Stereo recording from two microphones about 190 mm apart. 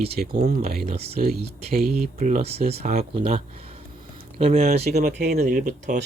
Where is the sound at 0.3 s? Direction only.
35° right (ahead or behind).